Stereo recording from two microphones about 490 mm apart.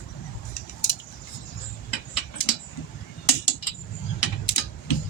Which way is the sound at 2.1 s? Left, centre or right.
Left.